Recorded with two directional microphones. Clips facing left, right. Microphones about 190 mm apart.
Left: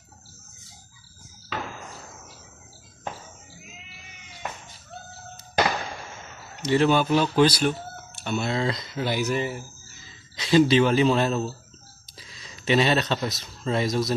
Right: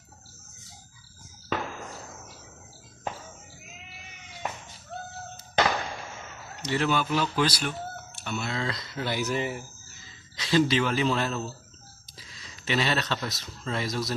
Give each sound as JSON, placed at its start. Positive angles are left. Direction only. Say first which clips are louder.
{"t": 1.5, "sound": "fireworks", "louder": "right 2 dB", "side_deg": -50}
{"t": 6.7, "sound": "speech", "louder": "left 6 dB", "side_deg": 25}
{"t": 12.6, "sound": "speech", "louder": "left 6 dB", "side_deg": 20}